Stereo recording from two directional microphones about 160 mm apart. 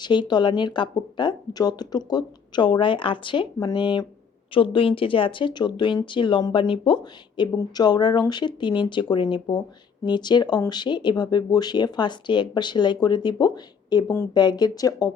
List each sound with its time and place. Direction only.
0.0 s speech: 30° left (ahead or behind)
13.9 s a woman's voice: 15° left (ahead or behind)
14.3 s speech: 25° left (ahead or behind)